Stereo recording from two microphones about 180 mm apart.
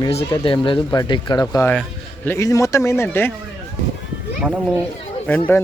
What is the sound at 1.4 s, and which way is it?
Speech, 15° left (ahead or behind).